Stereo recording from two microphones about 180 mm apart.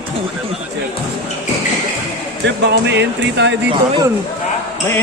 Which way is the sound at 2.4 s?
80° right.